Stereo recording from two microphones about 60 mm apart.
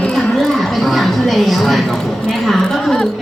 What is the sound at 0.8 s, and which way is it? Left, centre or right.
A man's voice, centre.